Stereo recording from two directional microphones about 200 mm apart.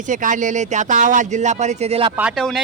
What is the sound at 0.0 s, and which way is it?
Speech, 40° right (ahead or behind).